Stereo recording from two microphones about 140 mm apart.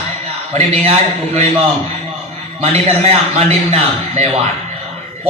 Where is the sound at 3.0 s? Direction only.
50° right (ahead or behind).